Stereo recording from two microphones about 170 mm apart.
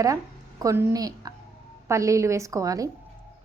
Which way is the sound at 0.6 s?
20° right (ahead or behind).